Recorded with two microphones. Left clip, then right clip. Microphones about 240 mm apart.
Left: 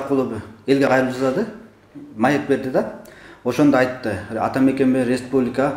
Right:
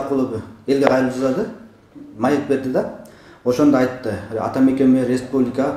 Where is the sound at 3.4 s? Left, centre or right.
Left.